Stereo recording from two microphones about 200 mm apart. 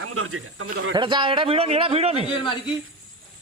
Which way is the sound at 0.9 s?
25° right (ahead or behind).